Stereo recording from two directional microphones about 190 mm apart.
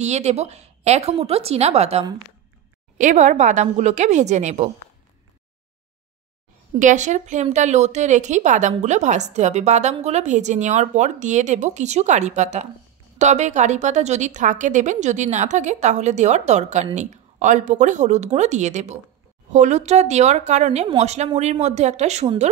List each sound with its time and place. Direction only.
0.0 s speech: 35° right (ahead or behind)
6.8 s speech: 40° right (ahead or behind)